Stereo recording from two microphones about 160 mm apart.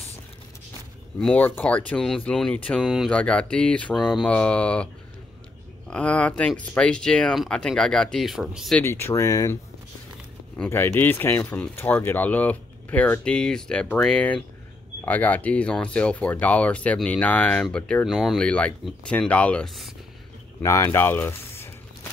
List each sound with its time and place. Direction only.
1.2 s speech: 10° left (ahead or behind)
5.9 s speech: 5° left (ahead or behind)
8.8 s speech: 15° left (ahead or behind)
10.6 s speech: 15° left (ahead or behind)
20.6 s speech: 20° left (ahead or behind)